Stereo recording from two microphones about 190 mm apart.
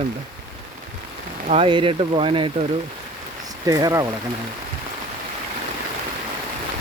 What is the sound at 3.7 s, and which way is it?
Speech, 20° right (ahead or behind).